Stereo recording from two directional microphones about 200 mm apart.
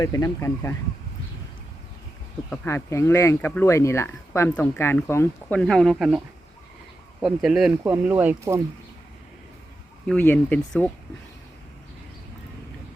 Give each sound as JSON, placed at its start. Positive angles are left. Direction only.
{"t": 0.0, "sound": "speech", "side_deg": 20}
{"t": 2.5, "sound": "speech", "side_deg": 10}
{"t": 10.1, "sound": "speech", "side_deg": 5}